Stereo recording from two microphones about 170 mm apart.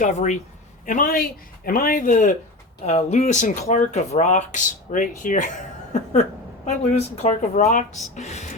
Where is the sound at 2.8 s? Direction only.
40° left (ahead or behind).